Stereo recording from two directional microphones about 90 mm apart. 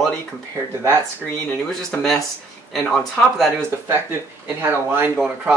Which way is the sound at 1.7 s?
5° left (ahead or behind).